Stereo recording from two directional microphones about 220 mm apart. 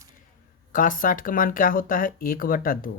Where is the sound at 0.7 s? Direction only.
40° left (ahead or behind).